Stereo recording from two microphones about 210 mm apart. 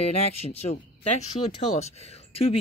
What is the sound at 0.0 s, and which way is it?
Speech, 30° left (ahead or behind).